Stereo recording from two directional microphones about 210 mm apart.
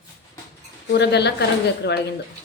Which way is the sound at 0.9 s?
55° left (ahead or behind).